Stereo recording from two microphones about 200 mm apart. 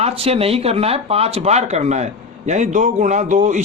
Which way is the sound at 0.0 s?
30° right (ahead or behind).